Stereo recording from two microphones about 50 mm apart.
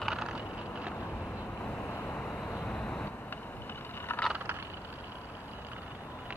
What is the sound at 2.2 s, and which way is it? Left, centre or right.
Vehicle, left.